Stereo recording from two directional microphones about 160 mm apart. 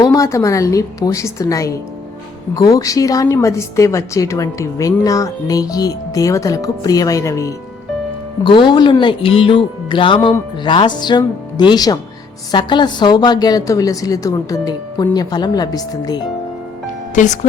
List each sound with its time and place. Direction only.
0.0 s a woman's voice: 20° left (ahead or behind)
8.4 s a woman's voice: 30° left (ahead or behind)
17.2 s speech: 50° left (ahead or behind)